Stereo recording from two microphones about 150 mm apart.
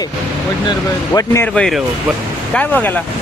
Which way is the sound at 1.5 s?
5° left (ahead or behind).